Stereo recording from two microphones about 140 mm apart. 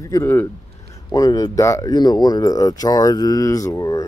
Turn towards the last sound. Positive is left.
turn(degrees=25)  # may be behind; listen again after turning